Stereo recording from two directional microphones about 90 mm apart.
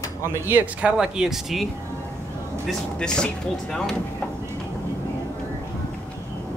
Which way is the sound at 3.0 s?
10° left (ahead or behind).